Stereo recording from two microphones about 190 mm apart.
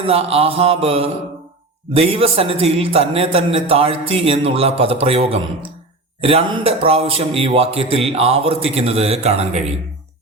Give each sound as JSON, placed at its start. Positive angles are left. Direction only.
{"t": 0.0, "sound": "a man's voice", "side_deg": -30}